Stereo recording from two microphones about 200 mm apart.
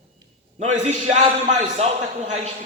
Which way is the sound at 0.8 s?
35° right (ahead or behind).